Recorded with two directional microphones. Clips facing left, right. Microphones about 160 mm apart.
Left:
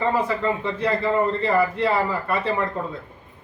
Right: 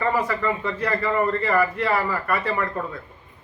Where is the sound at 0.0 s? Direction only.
25° left (ahead or behind).